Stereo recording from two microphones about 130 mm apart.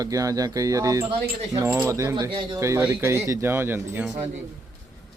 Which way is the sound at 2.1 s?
35° right (ahead or behind).